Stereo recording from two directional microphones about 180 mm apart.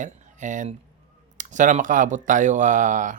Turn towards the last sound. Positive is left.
turn(degrees=-45)  # may be behind; listen again after turning